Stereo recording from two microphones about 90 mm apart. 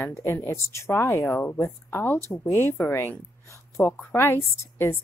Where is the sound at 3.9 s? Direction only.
25° left (ahead or behind).